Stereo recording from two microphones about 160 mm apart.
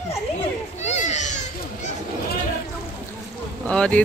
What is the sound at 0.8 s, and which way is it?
Children playing, 45° left (ahead or behind).